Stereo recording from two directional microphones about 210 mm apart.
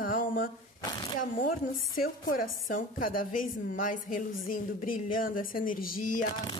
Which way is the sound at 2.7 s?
40° left (ahead or behind).